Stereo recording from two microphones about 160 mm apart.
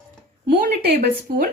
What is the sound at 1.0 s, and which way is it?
Speech, 60° right (ahead or behind).